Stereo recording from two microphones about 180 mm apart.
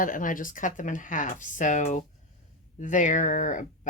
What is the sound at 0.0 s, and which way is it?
Speech, 50° left (ahead or behind).